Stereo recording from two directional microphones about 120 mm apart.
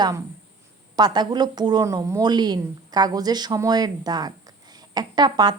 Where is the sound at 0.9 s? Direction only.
35° right (ahead or behind).